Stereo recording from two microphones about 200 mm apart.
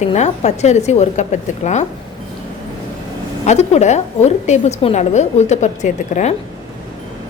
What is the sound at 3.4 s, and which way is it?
A woman's voice, 35° left (ahead or behind).